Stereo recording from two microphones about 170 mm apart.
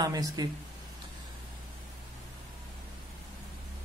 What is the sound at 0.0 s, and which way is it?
Speech, 20° right (ahead or behind).